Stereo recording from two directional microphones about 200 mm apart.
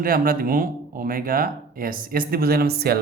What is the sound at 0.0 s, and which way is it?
Speech, 45° right (ahead or behind).